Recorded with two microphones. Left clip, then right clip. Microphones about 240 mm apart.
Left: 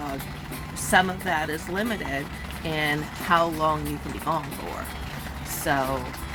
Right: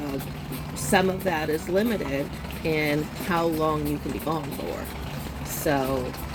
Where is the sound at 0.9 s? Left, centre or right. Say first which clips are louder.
Left 1 dB; centre.